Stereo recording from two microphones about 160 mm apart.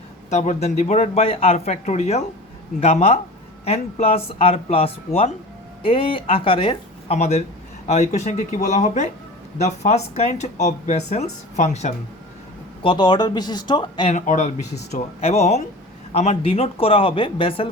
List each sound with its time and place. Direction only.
0.3 s speech: 45° left (ahead or behind)
7.2 s speech: 45° left (ahead or behind)
12.8 s speech: 30° left (ahead or behind)
14.1 s speech: 50° left (ahead or behind); by 17.7 s 35° left (ahead or behind)